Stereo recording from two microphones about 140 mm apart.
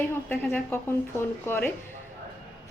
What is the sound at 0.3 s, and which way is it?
Speech, 10° left (ahead or behind).